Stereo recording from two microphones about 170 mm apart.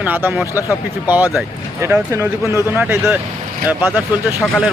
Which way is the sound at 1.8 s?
15° right (ahead or behind).